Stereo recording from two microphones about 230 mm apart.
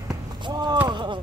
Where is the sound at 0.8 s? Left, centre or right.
Centre.